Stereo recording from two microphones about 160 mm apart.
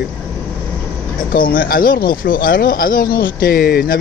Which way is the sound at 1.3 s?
65° left (ahead or behind).